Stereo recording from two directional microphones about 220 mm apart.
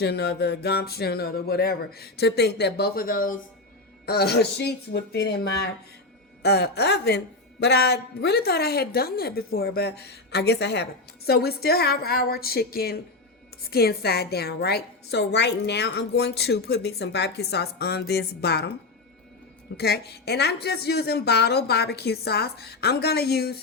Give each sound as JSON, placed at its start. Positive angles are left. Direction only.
{"t": 0.0, "sound": "a woman's voice", "side_deg": 50}
{"t": 19.7, "sound": "a woman's voice", "side_deg": 45}